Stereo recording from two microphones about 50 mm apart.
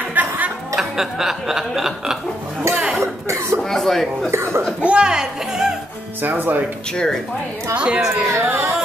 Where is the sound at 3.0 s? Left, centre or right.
Right.